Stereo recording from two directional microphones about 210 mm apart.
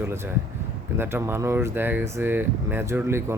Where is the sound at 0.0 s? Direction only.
10° right (ahead or behind).